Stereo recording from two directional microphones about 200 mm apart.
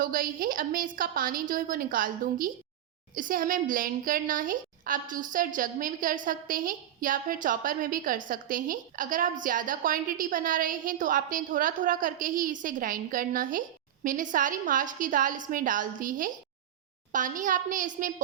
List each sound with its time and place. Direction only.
0.0 s a woman's voice: 45° right (ahead or behind)